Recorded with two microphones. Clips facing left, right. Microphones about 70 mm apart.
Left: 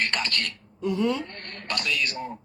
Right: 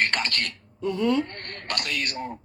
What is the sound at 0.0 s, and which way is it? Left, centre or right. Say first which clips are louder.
Speech: right 2 dB; right.